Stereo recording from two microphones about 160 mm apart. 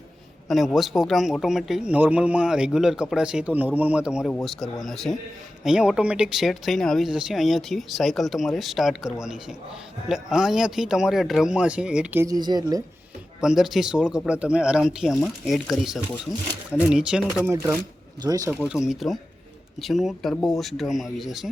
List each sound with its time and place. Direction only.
0.4 s speech: centre (ahead or behind)
12.2 s speech: 25° right (ahead or behind)
13.4 s speech: 5° right (ahead or behind); by 18.6 s 20° right (ahead or behind)
18.6 s speech: 5° right (ahead or behind)